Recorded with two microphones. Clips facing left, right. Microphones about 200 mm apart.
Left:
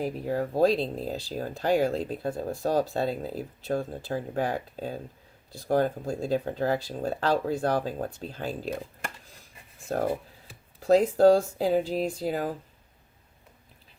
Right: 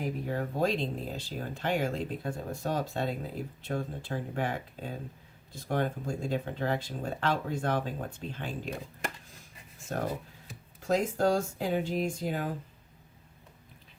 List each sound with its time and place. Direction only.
0.0 s speech: 35° left (ahead or behind)
10.8 s speech: 35° left (ahead or behind)